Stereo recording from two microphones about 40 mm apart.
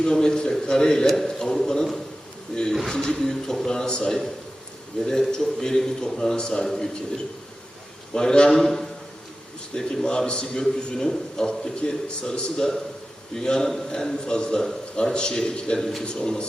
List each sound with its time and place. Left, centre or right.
0.0 s a man's voice: centre
8.1 s a man's voice: centre